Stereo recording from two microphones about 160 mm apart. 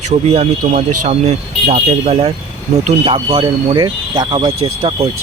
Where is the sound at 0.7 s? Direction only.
45° right (ahead or behind).